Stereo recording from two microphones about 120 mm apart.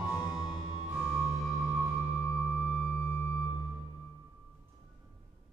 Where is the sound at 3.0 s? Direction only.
15° left (ahead or behind).